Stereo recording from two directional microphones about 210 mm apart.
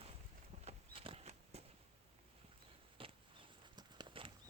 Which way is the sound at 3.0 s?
25° right (ahead or behind).